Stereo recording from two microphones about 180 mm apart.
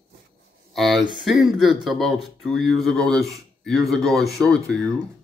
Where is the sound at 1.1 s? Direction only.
Centre (ahead or behind).